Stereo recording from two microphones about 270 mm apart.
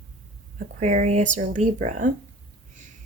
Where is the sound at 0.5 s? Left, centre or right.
Right.